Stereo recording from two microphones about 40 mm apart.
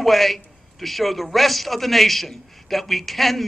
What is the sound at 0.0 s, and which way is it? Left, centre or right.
A man's voice, centre.